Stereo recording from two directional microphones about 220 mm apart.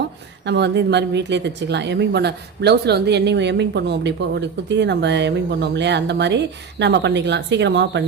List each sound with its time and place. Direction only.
0.4 s speech: 50° right (ahead or behind)